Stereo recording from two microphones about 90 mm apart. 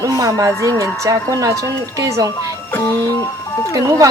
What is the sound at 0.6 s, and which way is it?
Speech, 35° left (ahead or behind).